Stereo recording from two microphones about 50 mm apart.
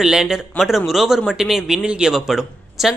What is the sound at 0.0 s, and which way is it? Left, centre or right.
Speech, centre.